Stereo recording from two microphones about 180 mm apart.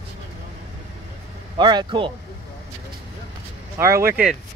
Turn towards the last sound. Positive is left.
turn(degrees=-10)  # may be behind; listen again after turning